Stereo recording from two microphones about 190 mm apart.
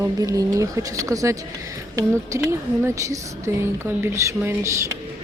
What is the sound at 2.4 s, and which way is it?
A woman's voice, 10° right (ahead or behind).